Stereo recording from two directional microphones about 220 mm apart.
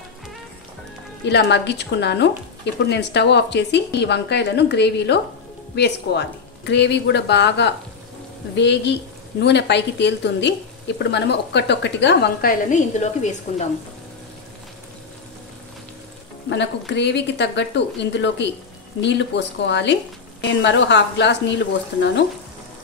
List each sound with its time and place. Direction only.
1.2 s speech: 50° left (ahead or behind); by 13.7 s 30° left (ahead or behind)
16.4 s speech: 55° left (ahead or behind)